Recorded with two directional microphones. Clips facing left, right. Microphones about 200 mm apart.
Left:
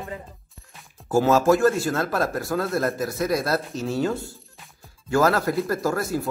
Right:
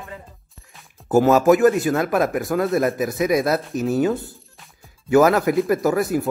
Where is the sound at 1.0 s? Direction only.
20° right (ahead or behind).